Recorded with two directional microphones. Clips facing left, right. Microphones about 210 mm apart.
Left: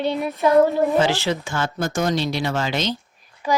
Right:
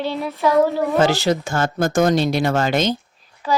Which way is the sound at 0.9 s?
40° right (ahead or behind).